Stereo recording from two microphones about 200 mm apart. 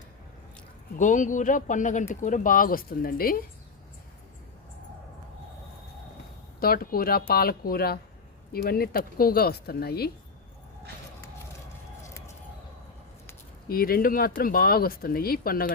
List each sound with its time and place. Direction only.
0.9 s speech: 40° left (ahead or behind)
6.6 s speech: 50° left (ahead or behind)
13.7 s speech: 50° left (ahead or behind)